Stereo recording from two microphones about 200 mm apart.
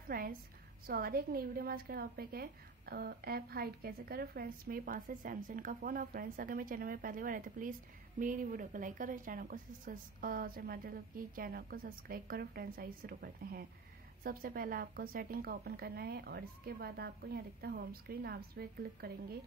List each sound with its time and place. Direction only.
0.1 s a woman's voice: 50° right (ahead or behind)